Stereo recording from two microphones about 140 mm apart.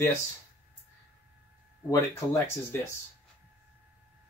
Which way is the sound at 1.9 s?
20° left (ahead or behind).